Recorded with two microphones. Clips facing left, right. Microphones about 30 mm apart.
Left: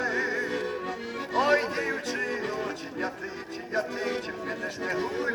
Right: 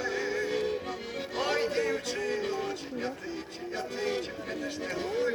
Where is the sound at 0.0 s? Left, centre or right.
Centre.